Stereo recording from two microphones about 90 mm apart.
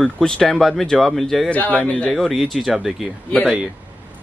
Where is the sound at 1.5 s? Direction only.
15° left (ahead or behind).